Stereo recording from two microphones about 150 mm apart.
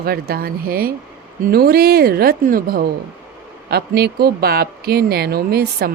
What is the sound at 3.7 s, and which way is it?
Speech, 90° right.